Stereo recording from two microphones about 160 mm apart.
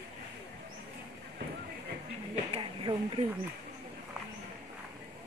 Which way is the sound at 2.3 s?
35° right (ahead or behind).